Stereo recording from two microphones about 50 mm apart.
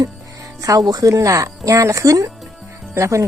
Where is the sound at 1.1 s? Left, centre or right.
Right.